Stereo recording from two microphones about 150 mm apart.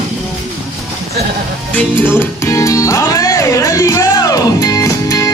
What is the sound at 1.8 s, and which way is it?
Music, 15° left (ahead or behind).